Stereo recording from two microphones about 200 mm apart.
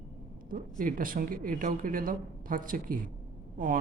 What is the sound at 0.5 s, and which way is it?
Speech, 45° right (ahead or behind).